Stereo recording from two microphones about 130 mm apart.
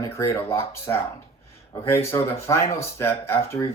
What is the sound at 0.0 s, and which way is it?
Speech, 20° left (ahead or behind).